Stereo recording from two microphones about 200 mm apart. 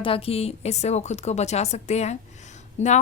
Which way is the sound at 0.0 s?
30° left (ahead or behind).